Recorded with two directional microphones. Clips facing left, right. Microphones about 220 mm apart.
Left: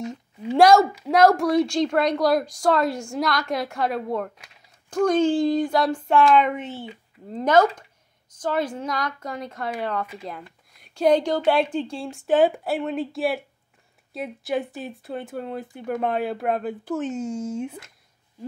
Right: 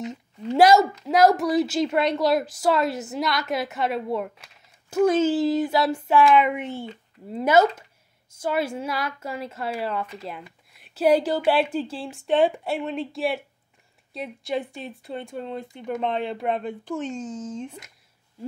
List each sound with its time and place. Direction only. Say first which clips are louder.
0.1 s a woman's voice: left 1 dB; centre (ahead or behind)